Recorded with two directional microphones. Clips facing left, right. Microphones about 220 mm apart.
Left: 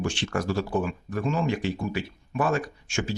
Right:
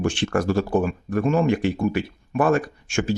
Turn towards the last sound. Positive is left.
turn(degrees=-55)  # may be behind; listen again after turning